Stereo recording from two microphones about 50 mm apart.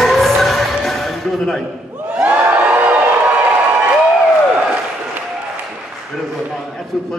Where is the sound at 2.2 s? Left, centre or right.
Right.